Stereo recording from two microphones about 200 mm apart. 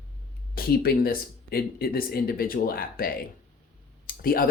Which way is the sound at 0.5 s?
50° left (ahead or behind).